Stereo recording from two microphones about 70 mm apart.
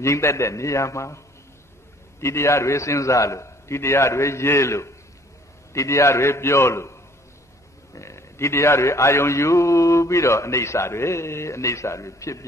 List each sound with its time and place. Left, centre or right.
0.0 s a man's voice: left